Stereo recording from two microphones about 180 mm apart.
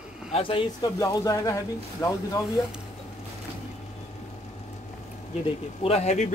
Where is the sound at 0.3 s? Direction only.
30° left (ahead or behind).